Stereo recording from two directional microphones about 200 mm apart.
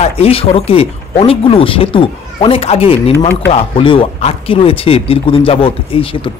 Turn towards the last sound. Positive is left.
turn(degrees=25)  # may be behind; listen again after turning